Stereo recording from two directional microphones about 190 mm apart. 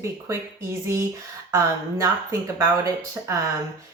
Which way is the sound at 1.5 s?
15° right (ahead or behind).